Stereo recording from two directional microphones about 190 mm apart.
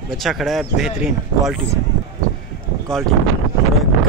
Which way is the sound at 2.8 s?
Centre (ahead or behind).